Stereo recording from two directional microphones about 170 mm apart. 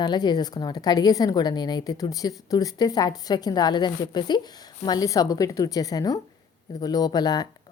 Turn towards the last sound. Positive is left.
turn(degrees=25)  # may be behind; listen again after turning